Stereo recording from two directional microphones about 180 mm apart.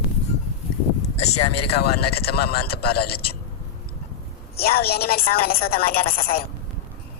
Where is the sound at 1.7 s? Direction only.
60° left (ahead or behind).